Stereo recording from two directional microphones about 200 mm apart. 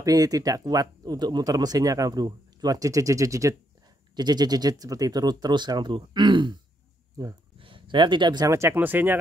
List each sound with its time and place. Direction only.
0.0 s speech: 20° right (ahead or behind)